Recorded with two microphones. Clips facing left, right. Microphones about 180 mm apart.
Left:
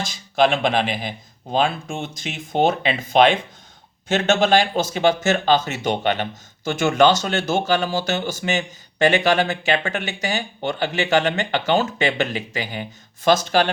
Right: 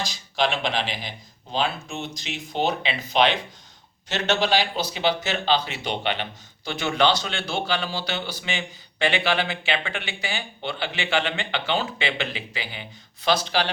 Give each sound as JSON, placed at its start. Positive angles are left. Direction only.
{"t": 0.0, "sound": "speech", "side_deg": 50}